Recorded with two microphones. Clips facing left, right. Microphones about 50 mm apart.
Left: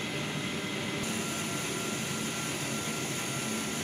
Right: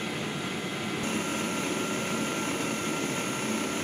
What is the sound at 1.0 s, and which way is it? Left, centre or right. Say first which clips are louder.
Vehicle: right 4 dB; right.